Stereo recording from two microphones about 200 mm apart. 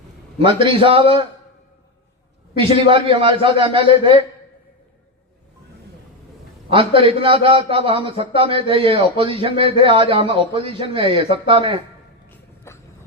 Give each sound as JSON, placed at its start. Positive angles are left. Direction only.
{"t": 0.4, "sound": "a man's voice", "side_deg": -25}
{"t": 2.6, "sound": "a man's voice", "side_deg": -25}
{"t": 6.7, "sound": "a man's voice", "side_deg": -25}
{"t": 12.7, "sound": "vehicle", "side_deg": 15}